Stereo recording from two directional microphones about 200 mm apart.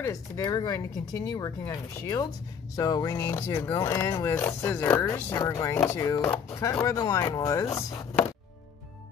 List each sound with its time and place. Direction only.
0.0 s speech: 20° left (ahead or behind)